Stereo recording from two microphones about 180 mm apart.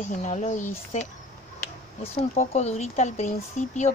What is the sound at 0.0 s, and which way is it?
Speech, 40° left (ahead or behind).